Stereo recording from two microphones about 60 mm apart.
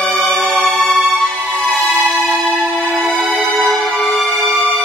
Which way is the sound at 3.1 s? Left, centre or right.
Centre.